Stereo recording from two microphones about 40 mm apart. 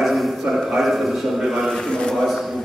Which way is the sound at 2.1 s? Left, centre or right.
Centre.